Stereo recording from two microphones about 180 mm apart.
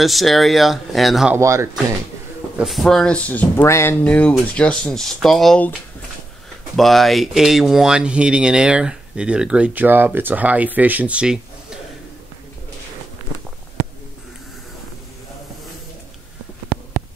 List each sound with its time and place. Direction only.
0.0 s speech: centre (ahead or behind)
1.3 s speech: 15° right (ahead or behind)
2.5 s speech: centre (ahead or behind)
6.8 s speech: centre (ahead or behind)